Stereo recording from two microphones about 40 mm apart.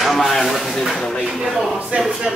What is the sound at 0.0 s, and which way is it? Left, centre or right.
A woman's voice, centre.